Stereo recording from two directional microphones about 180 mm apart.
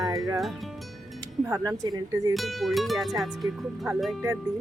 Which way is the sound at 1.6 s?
20° right (ahead or behind).